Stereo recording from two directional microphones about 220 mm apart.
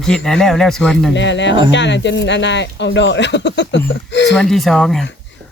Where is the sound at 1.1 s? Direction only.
55° left (ahead or behind).